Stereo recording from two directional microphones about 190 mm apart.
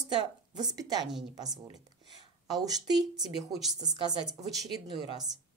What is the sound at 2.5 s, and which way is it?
Speech, 20° right (ahead or behind).